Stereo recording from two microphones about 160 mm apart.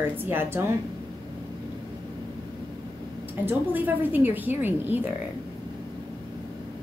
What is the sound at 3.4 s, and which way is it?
A woman's voice, 10° right (ahead or behind).